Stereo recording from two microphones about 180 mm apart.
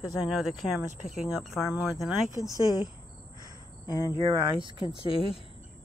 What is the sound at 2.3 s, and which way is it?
Speech, 20° left (ahead or behind).